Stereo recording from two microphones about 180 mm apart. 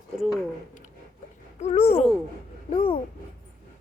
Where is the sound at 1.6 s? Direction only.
35° left (ahead or behind).